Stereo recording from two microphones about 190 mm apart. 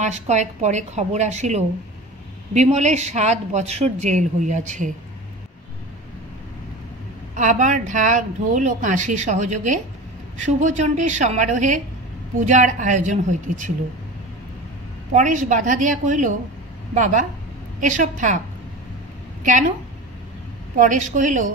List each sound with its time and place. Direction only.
0.0 s speech: 35° right (ahead or behind)
7.3 s speech: 40° right (ahead or behind)
15.1 s speech: 40° right (ahead or behind)
20.7 s speech: 40° right (ahead or behind)